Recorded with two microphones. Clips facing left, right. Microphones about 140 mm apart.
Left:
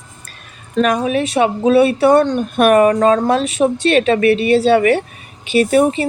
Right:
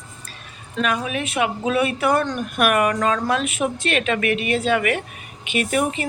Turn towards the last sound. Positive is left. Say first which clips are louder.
# left 9 dB
turn(degrees=35)  # may be behind; listen again after turning